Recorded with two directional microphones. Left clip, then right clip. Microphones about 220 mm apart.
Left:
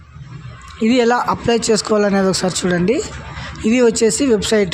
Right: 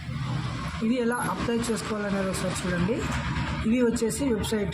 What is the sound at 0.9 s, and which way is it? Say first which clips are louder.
Speech: left 13 dB; 40° left (ahead or behind).